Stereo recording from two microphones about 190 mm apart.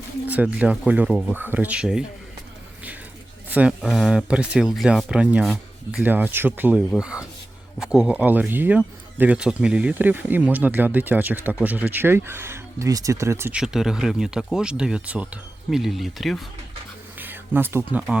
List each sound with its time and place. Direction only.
0.3 s speech: 5° right (ahead or behind)
3.5 s speech: 5° right (ahead or behind)
17.2 s a sound: 10° right (ahead or behind)